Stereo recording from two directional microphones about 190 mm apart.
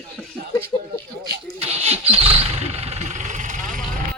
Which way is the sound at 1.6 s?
30° right (ahead or behind).